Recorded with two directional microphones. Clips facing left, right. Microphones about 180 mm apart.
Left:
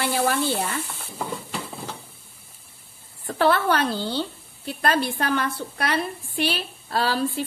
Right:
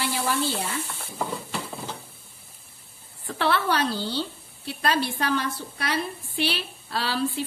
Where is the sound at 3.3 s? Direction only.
45° left (ahead or behind).